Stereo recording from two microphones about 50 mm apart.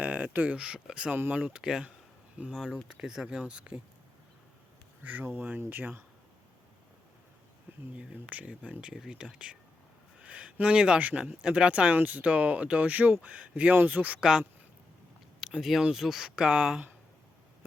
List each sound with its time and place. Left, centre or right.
0.0 s speech: right
0.5 s speech: centre
1.3 s speech: right
1.5 s speech: centre
2.4 s speech: right
2.8 s speech: centre
5.3 s speech: right
7.9 s speech: right
10.2 s a sound: right
11.0 s speech: right
11.9 s speech: right
14.2 s speech: centre
16.3 s speech: centre